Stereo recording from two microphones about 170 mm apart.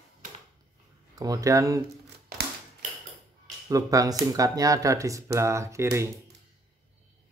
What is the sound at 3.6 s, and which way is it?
Speech, 20° right (ahead or behind).